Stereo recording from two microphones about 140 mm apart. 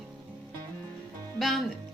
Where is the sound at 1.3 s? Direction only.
Centre (ahead or behind).